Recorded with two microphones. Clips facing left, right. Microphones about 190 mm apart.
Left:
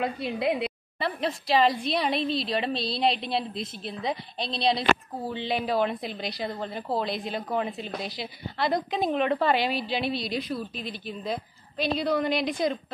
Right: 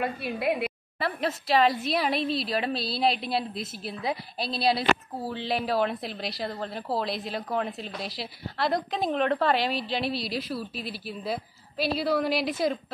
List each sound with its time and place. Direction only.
0.0 s a woman's voice: 20° left (ahead or behind)
0.9 s a woman's voice: centre (ahead or behind)